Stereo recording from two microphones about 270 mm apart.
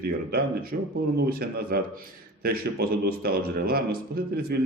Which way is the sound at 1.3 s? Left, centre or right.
Right.